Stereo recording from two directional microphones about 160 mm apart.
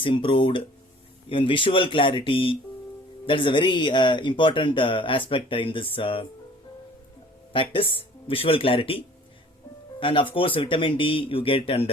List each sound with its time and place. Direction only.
0.0 s speech: 35° left (ahead or behind)
7.5 s speech: 35° left (ahead or behind)
10.0 s speech: 30° left (ahead or behind)